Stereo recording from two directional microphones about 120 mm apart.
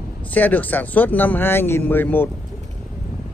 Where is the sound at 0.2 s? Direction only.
15° left (ahead or behind).